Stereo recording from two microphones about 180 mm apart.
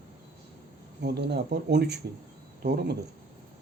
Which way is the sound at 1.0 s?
65° right (ahead or behind).